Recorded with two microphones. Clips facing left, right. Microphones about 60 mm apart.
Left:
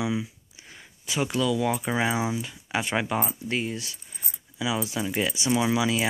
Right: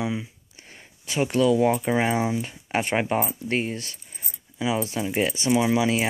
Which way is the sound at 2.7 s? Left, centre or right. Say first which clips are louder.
Right 3 dB; right.